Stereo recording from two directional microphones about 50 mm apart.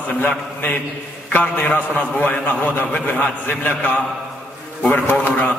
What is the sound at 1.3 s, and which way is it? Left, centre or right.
Speech, left.